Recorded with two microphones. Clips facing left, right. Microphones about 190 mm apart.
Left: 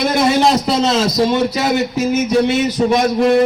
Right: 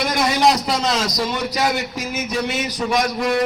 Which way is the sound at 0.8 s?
25° left (ahead or behind).